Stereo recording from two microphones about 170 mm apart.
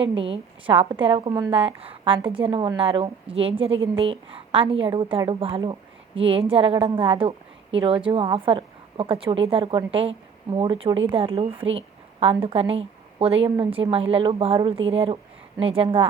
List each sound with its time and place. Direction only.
0.1 s a woman's voice: 30° right (ahead or behind)